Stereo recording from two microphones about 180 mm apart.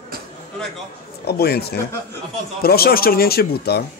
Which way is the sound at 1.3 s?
60° left (ahead or behind).